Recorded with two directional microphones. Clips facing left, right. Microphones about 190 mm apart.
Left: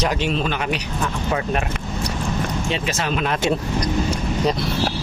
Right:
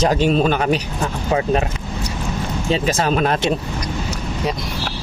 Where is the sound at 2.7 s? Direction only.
40° right (ahead or behind).